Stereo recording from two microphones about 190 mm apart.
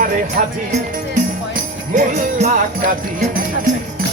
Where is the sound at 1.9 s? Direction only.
40° right (ahead or behind).